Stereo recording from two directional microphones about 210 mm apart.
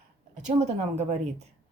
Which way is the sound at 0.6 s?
30° right (ahead or behind).